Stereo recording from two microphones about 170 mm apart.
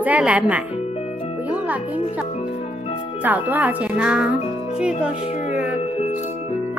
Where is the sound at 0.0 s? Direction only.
10° right (ahead or behind).